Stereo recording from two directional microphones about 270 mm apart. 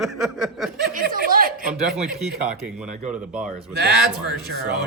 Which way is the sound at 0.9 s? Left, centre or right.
Right.